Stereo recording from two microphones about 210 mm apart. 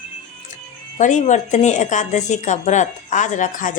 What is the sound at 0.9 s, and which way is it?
A woman's voice, 35° left (ahead or behind).